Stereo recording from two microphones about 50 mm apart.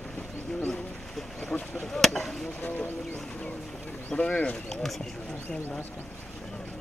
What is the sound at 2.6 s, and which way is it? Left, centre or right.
Speech, left.